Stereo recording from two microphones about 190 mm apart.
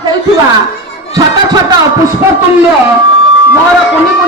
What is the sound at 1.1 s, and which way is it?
Speech, 20° right (ahead or behind).